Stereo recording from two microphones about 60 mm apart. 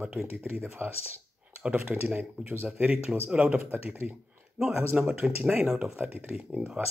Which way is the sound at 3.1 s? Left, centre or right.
Centre.